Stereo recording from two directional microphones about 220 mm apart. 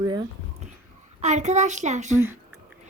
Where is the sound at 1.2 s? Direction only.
30° right (ahead or behind).